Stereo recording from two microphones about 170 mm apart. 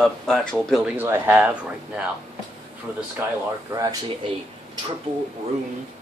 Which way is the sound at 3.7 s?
30° right (ahead or behind).